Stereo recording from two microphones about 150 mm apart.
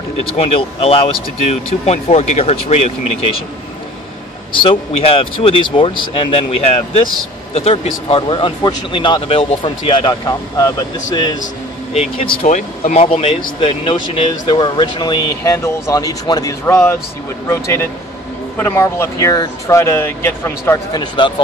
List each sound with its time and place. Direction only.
0.3 s speech: 40° left (ahead or behind)
4.5 s speech: 35° left (ahead or behind)
11.9 s speech: 40° left (ahead or behind)
12.4 s speech: 55° left (ahead or behind); by 16.9 s 15° left (ahead or behind)
18.6 s speech: 15° left (ahead or behind)
20.9 s speech: 30° left (ahead or behind)